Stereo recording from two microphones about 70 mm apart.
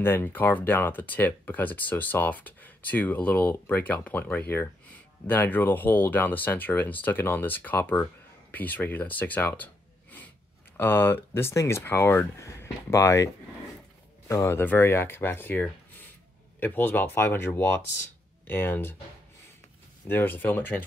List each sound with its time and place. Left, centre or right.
0.0 s speech: left
10.8 s speech: left
14.3 s speech: left
20.1 s speech: left